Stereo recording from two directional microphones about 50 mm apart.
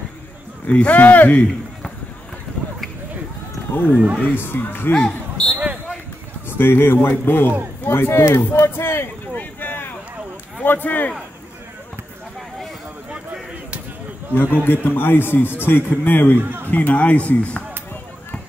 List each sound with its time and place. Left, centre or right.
0.7 s speech: left
3.7 s speech: left
4.0 s speech: right
4.4 s a man's voice: left
5.5 s basketball bounce: right
6.6 s a man's voice: left
9.3 s a sound: left
10.6 s speech: left
13.1 s a sound: right
14.3 s a man's voice: left
16.3 s speech: right
16.7 s speech: left